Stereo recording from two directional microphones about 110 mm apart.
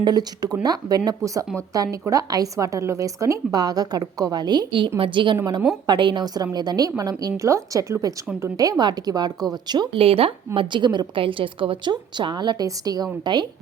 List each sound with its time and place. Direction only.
0.0 s a woman's voice: 40° right (ahead or behind)
10.0 s a woman's voice: 60° right (ahead or behind); by 13.5 s 40° right (ahead or behind)